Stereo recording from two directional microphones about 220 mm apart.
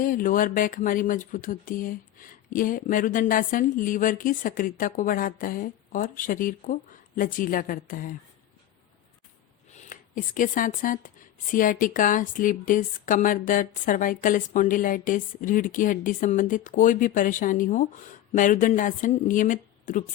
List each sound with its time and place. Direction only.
0.0 s speech: 40° left (ahead or behind)
9.9 s speech: 35° left (ahead or behind)